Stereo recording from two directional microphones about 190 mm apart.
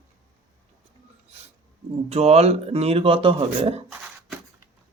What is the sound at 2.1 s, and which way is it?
Speech, 35° right (ahead or behind).